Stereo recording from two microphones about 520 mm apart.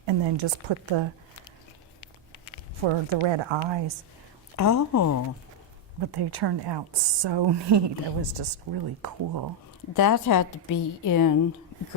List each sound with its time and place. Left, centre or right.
0.0 s a woman's voice: right
2.8 s a woman's voice: right
4.5 s a woman's voice: left
6.0 s a woman's voice: right
9.9 s a woman's voice: left